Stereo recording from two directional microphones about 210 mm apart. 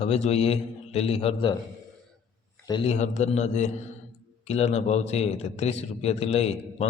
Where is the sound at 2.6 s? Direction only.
25° left (ahead or behind).